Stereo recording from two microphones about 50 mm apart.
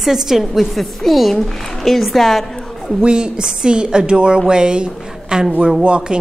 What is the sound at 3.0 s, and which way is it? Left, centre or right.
A woman's voice, centre.